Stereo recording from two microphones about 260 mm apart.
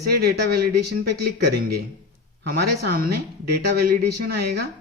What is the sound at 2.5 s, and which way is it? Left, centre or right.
Speech, right.